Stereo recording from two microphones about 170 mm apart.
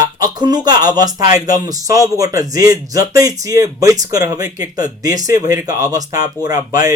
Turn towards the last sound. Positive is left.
turn(degrees=-20)  # may be behind; listen again after turning